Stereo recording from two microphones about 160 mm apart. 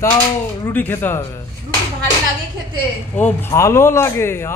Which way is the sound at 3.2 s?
15° left (ahead or behind).